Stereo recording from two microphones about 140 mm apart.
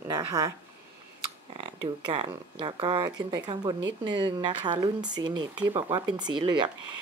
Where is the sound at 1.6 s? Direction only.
30° right (ahead or behind).